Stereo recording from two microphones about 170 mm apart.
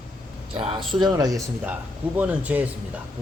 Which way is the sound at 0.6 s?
30° right (ahead or behind).